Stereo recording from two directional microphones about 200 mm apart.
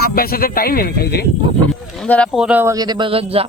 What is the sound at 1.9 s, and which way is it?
Speech, 5° left (ahead or behind).